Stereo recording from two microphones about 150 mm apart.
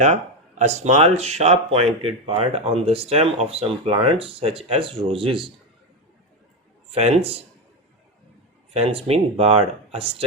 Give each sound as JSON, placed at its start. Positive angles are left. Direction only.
{"t": 0.0, "sound": "speech", "side_deg": -50}
{"t": 6.9, "sound": "speech", "side_deg": -40}
{"t": 8.7, "sound": "speech", "side_deg": -40}